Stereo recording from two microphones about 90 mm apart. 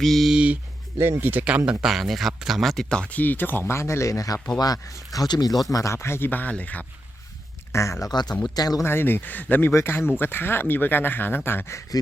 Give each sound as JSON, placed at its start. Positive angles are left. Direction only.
{"t": 0.0, "sound": "speech", "side_deg": 0}
{"t": 0.3, "sound": "a sound", "side_deg": -15}
{"t": 0.9, "sound": "speech", "side_deg": -30}
{"t": 1.8, "sound": "speech", "side_deg": 0}
{"t": 5.7, "sound": "speech", "side_deg": 35}
{"t": 7.7, "sound": "speech", "side_deg": 35}
{"t": 8.1, "sound": "speech", "side_deg": 50}
{"t": 8.8, "sound": "speech", "side_deg": 25}